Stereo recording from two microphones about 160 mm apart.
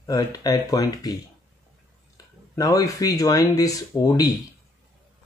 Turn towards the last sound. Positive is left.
turn(degrees=20)  # may be behind; listen again after turning